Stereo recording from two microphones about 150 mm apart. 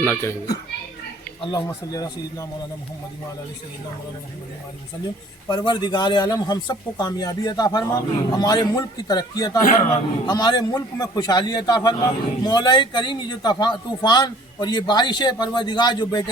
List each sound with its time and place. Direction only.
0.0 s speech: 10° left (ahead or behind)
1.4 s a man's voice: 30° left (ahead or behind)
5.5 s a man's voice: 30° left (ahead or behind)